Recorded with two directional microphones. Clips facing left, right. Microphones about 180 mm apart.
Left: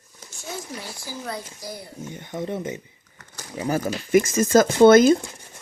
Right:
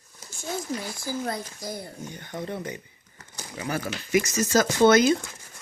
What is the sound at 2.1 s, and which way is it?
Speech, 20° left (ahead or behind).